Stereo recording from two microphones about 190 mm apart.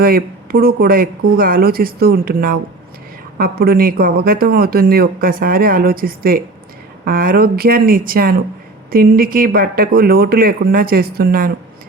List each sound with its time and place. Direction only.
0.0 s a man's voice: 50° right (ahead or behind)